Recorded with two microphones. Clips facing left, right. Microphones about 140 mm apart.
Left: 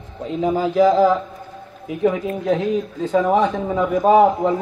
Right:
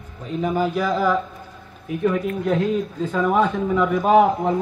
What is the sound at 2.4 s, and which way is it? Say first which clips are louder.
A man's voice: left 3 dB; 90° left.